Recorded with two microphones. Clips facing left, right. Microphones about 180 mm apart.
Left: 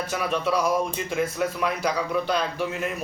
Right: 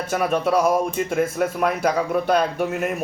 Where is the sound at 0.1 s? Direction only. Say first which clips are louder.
Right 6 dB; 50° right (ahead or behind).